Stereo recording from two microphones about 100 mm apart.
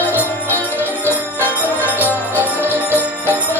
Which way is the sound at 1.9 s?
15° right (ahead or behind).